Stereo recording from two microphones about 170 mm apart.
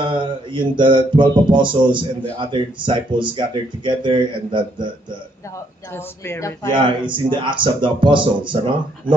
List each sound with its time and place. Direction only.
0.0 s speech: 30° right (ahead or behind)
5.9 s a woman's voice: 15° left (ahead or behind)
6.7 s speech: 30° right (ahead or behind)